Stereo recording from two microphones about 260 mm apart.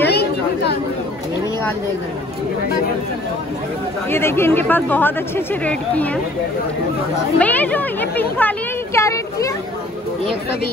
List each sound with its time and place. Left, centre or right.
0.0 s chatter: left
4.1 s speech: centre
7.3 s speech: centre